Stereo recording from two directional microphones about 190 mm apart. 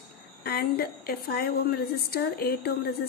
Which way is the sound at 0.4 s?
55° left (ahead or behind).